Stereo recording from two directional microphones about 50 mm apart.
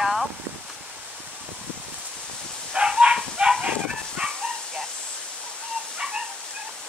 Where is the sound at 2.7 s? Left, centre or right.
Centre.